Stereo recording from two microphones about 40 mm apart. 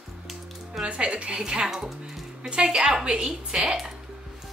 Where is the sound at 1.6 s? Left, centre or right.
Centre.